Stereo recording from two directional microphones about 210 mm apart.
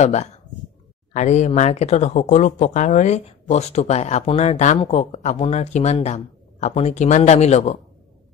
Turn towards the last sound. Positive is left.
turn(degrees=30)  # may be behind; listen again after turning